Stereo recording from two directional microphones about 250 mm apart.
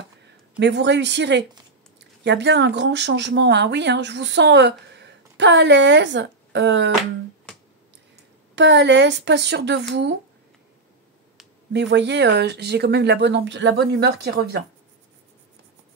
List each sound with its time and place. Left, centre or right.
0.6 s speech: right
8.5 s speech: right
11.7 s speech: right